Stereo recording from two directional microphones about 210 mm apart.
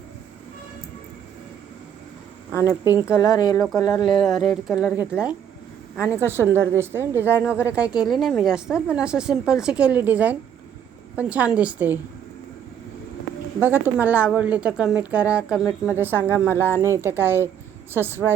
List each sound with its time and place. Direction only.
2.5 s speech: 10° right (ahead or behind)
3.2 s speech: 20° left (ahead or behind)
4.1 s a woman's voice: centre (ahead or behind)
13.6 s a woman's voice: 10° right (ahead or behind)